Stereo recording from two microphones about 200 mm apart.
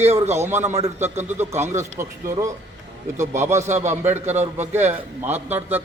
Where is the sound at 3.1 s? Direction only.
35° right (ahead or behind).